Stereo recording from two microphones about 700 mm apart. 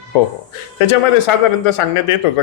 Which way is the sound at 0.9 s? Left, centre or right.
Left.